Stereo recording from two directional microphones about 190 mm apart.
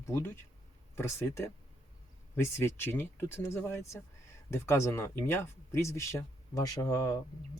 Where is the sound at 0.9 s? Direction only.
15° left (ahead or behind).